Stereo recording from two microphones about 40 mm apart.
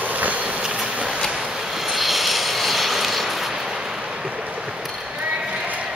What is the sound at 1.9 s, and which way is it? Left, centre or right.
Vehicle, centre.